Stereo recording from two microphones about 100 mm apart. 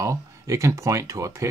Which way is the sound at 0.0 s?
30° right (ahead or behind).